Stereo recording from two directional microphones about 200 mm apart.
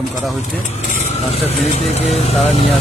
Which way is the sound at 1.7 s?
35° left (ahead or behind).